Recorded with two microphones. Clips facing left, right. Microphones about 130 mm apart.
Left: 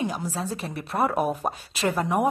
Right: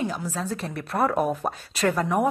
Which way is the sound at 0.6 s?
5° left (ahead or behind).